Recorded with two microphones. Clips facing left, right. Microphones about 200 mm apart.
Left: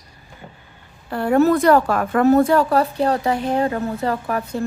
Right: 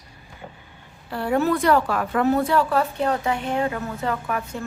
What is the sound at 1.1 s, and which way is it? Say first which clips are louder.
A woman's voice: left 6 dB; 50° left (ahead or behind).